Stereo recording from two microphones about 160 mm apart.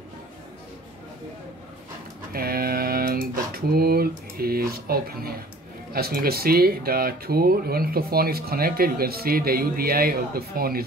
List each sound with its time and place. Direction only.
2.3 s speech: 70° right (ahead or behind)